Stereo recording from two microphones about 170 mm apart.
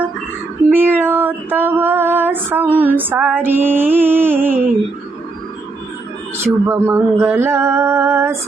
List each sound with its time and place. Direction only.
0.7 s female singing: 10° right (ahead or behind)
6.3 s speech: 15° right (ahead or behind)